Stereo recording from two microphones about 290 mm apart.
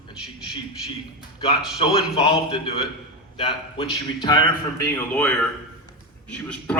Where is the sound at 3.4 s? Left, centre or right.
Centre.